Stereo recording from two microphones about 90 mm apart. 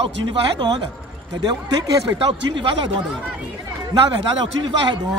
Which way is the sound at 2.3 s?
60° right (ahead or behind).